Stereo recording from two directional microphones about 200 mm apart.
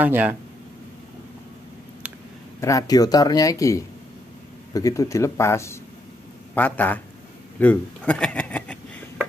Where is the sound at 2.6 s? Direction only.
15° left (ahead or behind).